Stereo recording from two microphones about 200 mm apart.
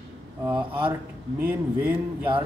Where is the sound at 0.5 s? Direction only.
25° right (ahead or behind).